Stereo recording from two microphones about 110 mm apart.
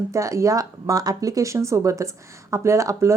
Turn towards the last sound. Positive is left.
turn(degrees=-25)  # may be behind; listen again after turning